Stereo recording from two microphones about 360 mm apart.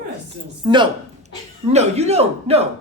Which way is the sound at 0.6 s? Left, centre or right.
Centre.